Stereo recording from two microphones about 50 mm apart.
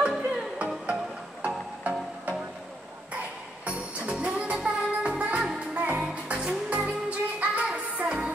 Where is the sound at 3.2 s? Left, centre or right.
Right.